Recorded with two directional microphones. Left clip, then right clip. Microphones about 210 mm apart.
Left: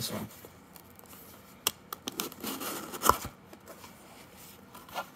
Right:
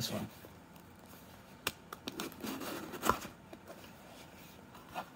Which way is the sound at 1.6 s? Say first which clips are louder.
Left 6 dB; 30° left (ahead or behind).